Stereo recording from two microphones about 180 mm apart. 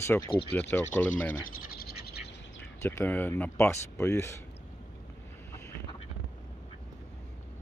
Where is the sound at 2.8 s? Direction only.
10° left (ahead or behind).